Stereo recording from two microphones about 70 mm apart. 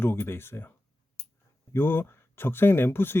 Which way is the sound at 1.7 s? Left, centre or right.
Left.